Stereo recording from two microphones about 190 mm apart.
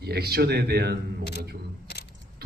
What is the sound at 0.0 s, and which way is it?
Speech, 60° right (ahead or behind).